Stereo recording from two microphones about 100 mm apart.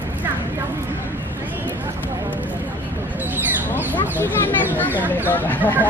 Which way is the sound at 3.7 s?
20° left (ahead or behind).